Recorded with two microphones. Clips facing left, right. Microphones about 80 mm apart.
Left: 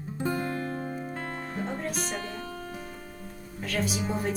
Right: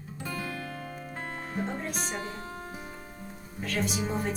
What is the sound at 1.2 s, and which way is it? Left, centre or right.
Music, centre.